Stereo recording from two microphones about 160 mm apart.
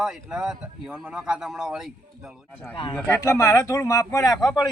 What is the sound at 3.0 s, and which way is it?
Speech, 15° left (ahead or behind).